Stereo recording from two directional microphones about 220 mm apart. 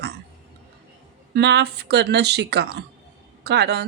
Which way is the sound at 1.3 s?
50° right (ahead or behind).